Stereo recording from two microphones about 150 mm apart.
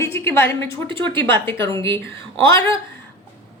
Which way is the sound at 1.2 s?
15° left (ahead or behind).